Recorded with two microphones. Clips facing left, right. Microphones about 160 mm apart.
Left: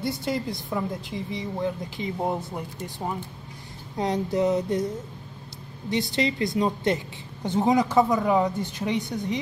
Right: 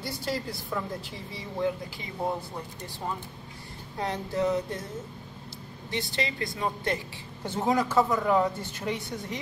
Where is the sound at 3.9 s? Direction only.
20° left (ahead or behind).